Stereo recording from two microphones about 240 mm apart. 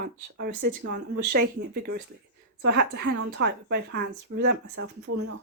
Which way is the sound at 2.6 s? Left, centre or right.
Right.